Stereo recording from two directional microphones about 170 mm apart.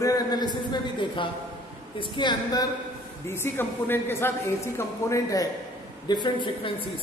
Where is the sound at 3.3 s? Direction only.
15° left (ahead or behind); by 6.9 s 30° left (ahead or behind).